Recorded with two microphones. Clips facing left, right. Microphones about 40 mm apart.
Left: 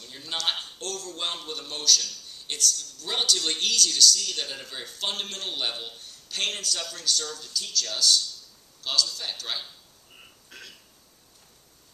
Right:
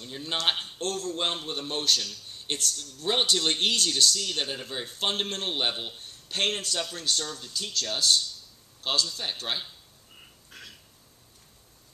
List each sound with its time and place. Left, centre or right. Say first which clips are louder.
0.0 s a man's voice: right 2 dB; right